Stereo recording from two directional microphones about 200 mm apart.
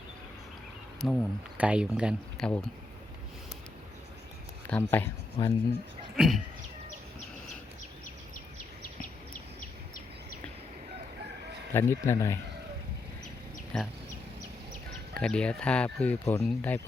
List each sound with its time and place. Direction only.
1.0 s speech: centre (ahead or behind)
4.7 s speech: 10° left (ahead or behind)
5.4 s speech: 25° left (ahead or behind)
6.1 s speech: centre (ahead or behind)
8.5 s a sound: 45° left (ahead or behind)
11.7 s speech: 10° left (ahead or behind)
13.7 s speech: centre (ahead or behind)
15.1 s speech: 5° left (ahead or behind)